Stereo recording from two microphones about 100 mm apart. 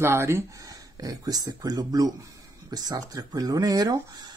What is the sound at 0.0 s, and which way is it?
Speech, 25° right (ahead or behind).